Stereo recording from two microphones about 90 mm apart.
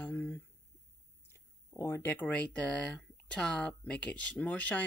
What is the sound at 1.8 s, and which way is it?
Speech, 25° left (ahead or behind).